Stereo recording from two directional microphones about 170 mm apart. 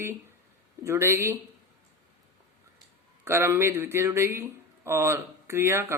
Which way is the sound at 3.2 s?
15° right (ahead or behind).